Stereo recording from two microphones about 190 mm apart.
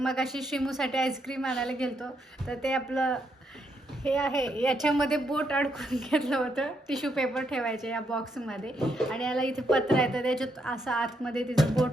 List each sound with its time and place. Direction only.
0.0 s a woman's voice: centre (ahead or behind)